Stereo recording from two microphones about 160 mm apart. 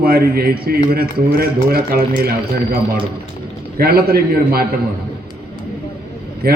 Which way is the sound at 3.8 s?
70° right (ahead or behind).